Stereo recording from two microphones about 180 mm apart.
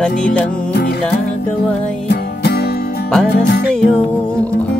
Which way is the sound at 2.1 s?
65° left (ahead or behind).